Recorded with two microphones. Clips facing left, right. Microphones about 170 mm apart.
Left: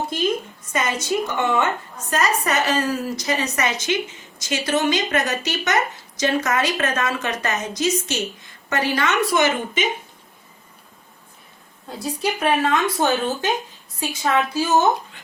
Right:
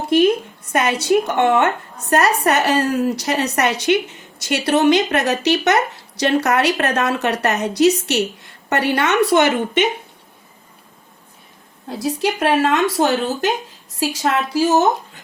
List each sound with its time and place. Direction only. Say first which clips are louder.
0.7 s a woman's voice: right 7 dB; 65° right (ahead or behind)
11.9 s speech: right 4 dB; 80° right
14.0 s a woman's voice: right 2 dB; 90° right